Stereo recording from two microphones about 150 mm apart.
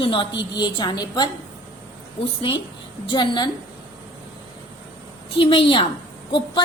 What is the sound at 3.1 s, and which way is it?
Speech, 30° left (ahead or behind).